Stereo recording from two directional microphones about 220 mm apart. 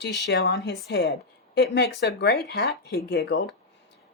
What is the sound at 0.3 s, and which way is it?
Speech, 50° left (ahead or behind).